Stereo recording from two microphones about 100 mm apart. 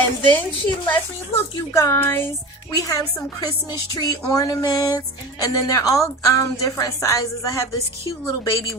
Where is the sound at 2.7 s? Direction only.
35° left (ahead or behind).